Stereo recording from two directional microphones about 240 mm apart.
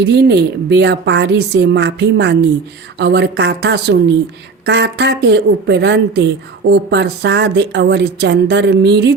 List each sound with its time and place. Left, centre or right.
0.0 s speech: right